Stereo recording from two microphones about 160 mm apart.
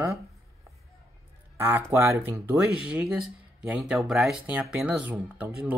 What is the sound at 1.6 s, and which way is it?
Speech, 15° right (ahead or behind).